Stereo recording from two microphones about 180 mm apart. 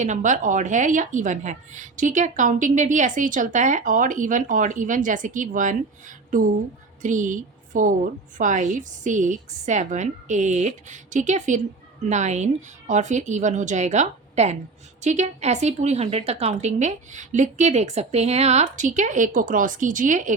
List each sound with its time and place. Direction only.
0.0 s a woman's voice: 45° right (ahead or behind)